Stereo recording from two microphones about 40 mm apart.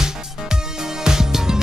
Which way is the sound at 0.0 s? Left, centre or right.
Centre.